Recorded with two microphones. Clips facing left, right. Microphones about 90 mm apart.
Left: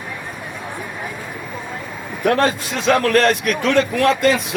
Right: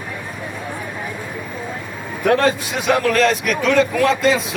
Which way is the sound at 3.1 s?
55° left (ahead or behind).